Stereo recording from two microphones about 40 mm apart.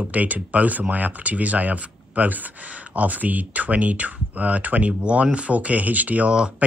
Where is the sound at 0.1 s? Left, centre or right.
Right.